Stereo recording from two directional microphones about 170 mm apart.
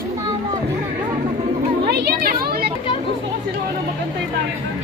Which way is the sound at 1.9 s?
70° right (ahead or behind).